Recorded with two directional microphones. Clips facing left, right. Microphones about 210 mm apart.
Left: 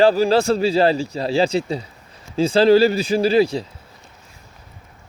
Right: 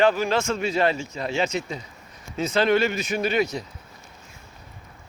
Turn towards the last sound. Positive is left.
turn(degrees=30)  # may be behind; listen again after turning